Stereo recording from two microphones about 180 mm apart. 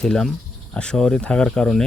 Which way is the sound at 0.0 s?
5° left (ahead or behind).